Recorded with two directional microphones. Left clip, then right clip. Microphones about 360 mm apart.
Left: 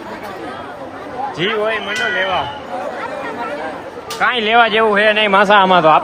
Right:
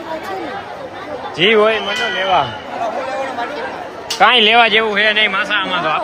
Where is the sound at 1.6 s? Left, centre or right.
Right.